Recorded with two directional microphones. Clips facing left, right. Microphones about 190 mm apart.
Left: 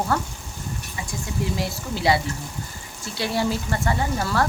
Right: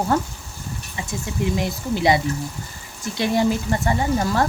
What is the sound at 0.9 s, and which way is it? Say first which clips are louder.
Speech: right 3 dB; 20° right (ahead or behind).